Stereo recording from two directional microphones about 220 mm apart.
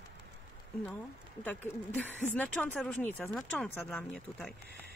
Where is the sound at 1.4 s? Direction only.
10° left (ahead or behind).